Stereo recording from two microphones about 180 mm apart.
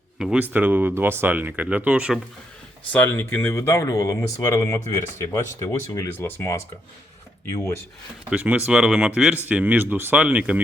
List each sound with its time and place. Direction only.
0.2 s speech: 5° right (ahead or behind)
2.9 s speech: 10° left (ahead or behind)
8.3 s speech: 5° right (ahead or behind)